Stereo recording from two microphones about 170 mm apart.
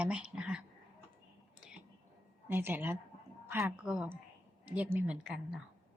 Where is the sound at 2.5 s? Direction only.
10° right (ahead or behind).